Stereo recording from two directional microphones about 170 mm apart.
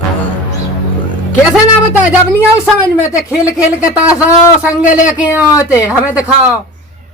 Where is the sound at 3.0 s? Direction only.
5° right (ahead or behind).